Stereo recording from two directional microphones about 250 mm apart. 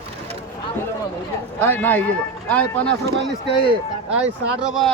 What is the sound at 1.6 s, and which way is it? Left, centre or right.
A man's voice, centre.